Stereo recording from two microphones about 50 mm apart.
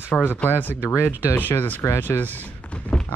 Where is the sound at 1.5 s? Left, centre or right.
Left.